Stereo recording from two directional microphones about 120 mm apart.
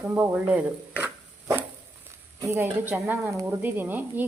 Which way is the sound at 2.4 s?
20° right (ahead or behind).